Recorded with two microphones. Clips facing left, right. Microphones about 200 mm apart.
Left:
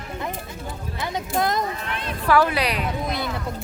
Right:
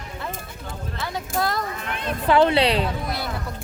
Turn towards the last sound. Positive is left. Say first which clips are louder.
# left 2 dB
turn(degrees=20)  # may be behind; listen again after turning